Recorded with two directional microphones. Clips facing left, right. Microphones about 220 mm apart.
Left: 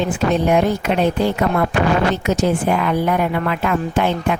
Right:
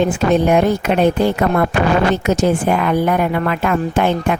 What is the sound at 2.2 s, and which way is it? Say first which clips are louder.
Speech: right 2 dB; 50° right (ahead or behind).